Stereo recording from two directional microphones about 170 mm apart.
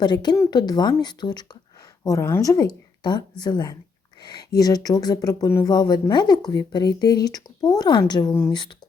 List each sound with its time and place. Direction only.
0.0 s speech: 25° left (ahead or behind)